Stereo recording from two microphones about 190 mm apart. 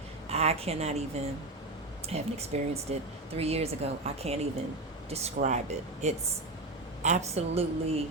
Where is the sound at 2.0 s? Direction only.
35° right (ahead or behind).